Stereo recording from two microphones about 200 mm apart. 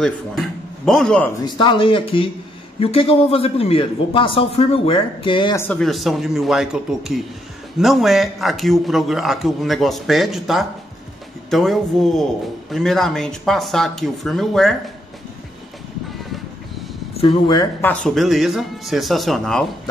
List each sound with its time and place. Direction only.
0.8 s speech: 5° left (ahead or behind)
1.4 s a man's voice: 25° left (ahead or behind)
5.6 s speech: 5° left (ahead or behind)
17.2 s a man's voice: 25° left (ahead or behind)
18.0 s speech: centre (ahead or behind)